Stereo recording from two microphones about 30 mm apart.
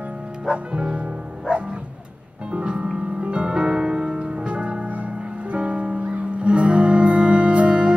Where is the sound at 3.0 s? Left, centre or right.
Right.